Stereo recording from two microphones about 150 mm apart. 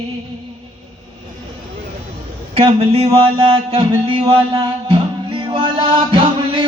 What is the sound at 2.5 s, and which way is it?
Speech, 40° right (ahead or behind).